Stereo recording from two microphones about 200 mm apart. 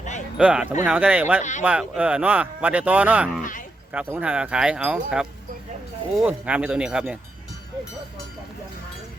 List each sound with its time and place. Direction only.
0.3 s speech: 5° right (ahead or behind)
1.4 s speech: 35° left (ahead or behind)
1.6 s speech: 5° right (ahead or behind)